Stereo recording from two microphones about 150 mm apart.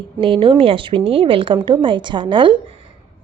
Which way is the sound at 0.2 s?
35° right (ahead or behind).